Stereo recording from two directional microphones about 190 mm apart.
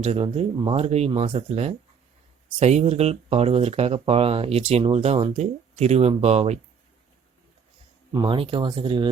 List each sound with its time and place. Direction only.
0.0 s speech: 35° right (ahead or behind)
8.1 s speech: 25° right (ahead or behind)